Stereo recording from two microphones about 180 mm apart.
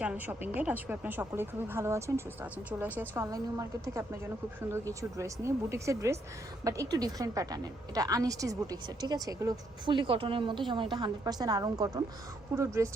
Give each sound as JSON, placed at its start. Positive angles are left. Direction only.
{"t": 0.0, "sound": "a woman's voice", "side_deg": -5}